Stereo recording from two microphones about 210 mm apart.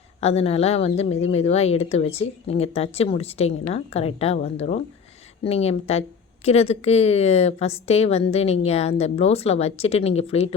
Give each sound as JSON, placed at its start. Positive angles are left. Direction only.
{"t": 0.2, "sound": "a woman's voice", "side_deg": 30}